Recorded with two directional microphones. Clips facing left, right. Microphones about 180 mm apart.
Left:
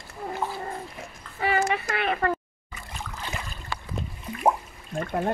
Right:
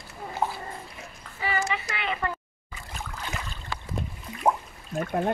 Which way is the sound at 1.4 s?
55° left (ahead or behind).